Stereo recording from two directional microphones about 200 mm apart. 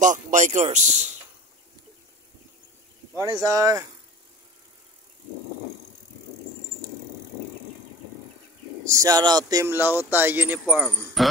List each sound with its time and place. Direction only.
0.0 s a man's voice: 40° right (ahead or behind)
3.4 s speech: 15° right (ahead or behind)
8.8 s speech: 15° right (ahead or behind); by 11.2 s centre (ahead or behind)